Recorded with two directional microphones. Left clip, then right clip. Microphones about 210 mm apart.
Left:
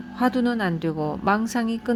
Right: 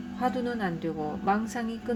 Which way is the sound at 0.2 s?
45° left (ahead or behind).